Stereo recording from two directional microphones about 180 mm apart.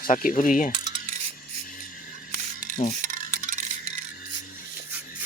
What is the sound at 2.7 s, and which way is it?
Mechanisms, 45° right (ahead or behind).